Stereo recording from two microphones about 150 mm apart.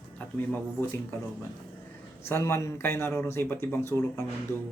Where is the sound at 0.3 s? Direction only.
15° left (ahead or behind).